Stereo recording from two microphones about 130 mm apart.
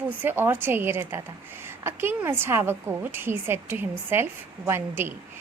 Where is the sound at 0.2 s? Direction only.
15° right (ahead or behind).